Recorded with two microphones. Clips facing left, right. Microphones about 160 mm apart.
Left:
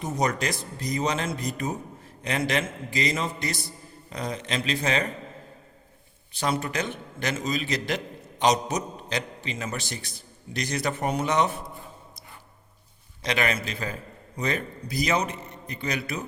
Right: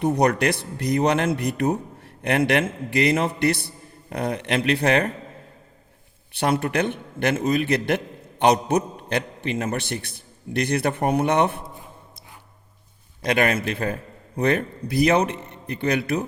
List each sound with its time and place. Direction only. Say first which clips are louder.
0.0 s a man's voice: right 7 dB; 60° right (ahead or behind)
6.3 s a man's voice: right 5 dB; 60° right (ahead or behind)
13.2 s a man's voice: right 6 dB; 55° right (ahead or behind)